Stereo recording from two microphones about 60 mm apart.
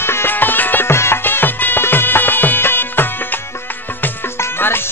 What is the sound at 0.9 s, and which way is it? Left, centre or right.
Music, left.